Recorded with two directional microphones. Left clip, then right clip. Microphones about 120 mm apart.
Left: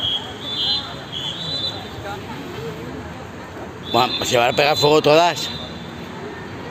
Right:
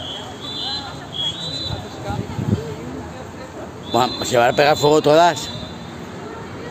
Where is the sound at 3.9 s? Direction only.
35° right (ahead or behind).